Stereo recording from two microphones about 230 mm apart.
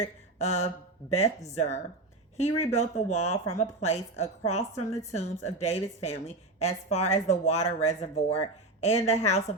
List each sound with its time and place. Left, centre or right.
0.0 s mantra: left
1.5 s a woman's voice: left
4.7 s a woman's voice: centre
5.1 s a woman's voice: left